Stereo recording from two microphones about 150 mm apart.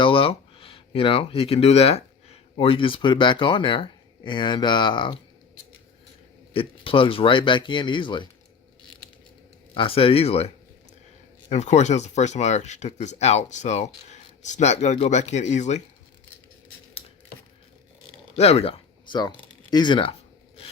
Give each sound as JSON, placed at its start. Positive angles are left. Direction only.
{"t": 0.0, "sound": "speech", "side_deg": 35}
{"t": 6.5, "sound": "speech", "side_deg": 35}
{"t": 9.7, "sound": "speech", "side_deg": 40}
{"t": 18.3, "sound": "speech", "side_deg": 45}